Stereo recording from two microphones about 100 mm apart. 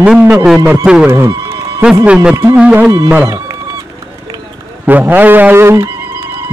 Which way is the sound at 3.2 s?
35° right (ahead or behind).